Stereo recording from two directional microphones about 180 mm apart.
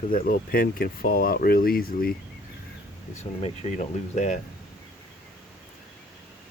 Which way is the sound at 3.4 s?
40° left (ahead or behind).